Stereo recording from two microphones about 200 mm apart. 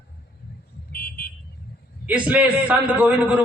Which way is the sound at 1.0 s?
50° left (ahead or behind).